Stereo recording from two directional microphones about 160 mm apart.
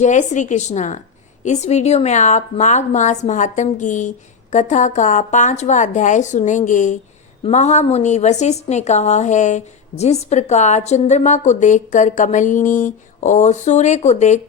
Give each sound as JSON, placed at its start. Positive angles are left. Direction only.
{"t": 0.0, "sound": "a woman's voice", "side_deg": 50}